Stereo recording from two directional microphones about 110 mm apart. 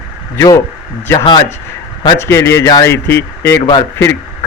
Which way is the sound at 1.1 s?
45° left (ahead or behind).